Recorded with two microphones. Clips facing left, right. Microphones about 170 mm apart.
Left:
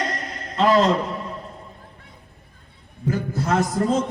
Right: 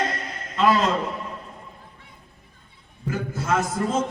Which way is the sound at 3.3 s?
35° left (ahead or behind).